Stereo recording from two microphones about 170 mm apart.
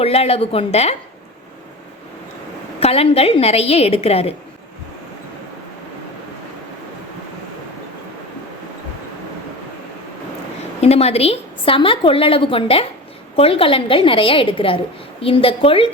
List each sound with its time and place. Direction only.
0.0 s a woman's voice: 35° left (ahead or behind)
2.8 s a woman's voice: 35° left (ahead or behind)
10.8 s a woman's voice: 40° left (ahead or behind)